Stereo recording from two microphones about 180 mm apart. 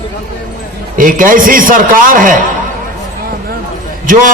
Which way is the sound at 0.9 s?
50° right (ahead or behind).